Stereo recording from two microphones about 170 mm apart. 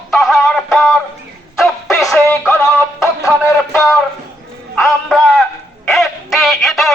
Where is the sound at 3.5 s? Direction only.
Centre (ahead or behind).